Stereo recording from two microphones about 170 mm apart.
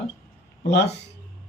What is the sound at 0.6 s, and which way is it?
Speech, 85° left.